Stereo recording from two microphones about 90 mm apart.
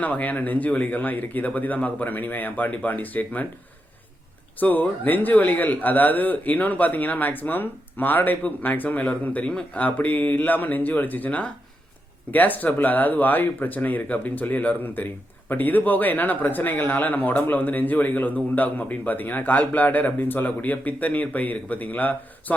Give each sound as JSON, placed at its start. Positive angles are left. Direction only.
{"t": 0.0, "sound": "a man's voice", "side_deg": 15}
{"t": 4.6, "sound": "a man's voice", "side_deg": 20}